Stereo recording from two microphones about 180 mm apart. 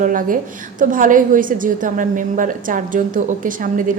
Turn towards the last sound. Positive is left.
turn(degrees=-50)  # may be behind; listen again after turning